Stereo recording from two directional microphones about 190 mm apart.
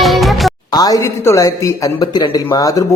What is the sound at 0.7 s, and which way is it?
A woman's voice, 20° left (ahead or behind).